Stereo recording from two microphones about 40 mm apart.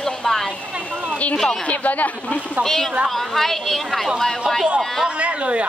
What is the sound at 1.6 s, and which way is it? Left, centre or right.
Speech, left.